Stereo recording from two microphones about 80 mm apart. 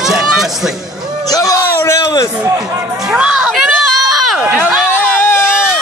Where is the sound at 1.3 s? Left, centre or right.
Left.